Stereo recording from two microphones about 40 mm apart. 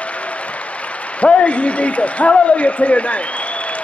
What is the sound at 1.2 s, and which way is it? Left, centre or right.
A man's voice, left.